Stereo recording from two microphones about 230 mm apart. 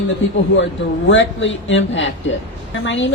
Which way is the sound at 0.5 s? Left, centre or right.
Left.